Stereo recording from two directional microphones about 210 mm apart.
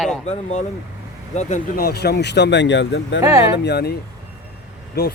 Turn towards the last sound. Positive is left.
turn(degrees=50)  # may be behind; listen again after turning